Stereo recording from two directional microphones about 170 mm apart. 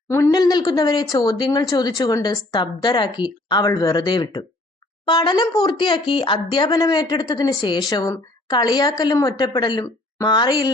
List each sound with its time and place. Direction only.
0.1 s speech: 20° left (ahead or behind)